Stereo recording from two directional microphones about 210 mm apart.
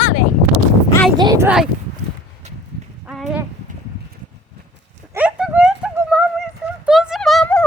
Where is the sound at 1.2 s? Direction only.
20° right (ahead or behind).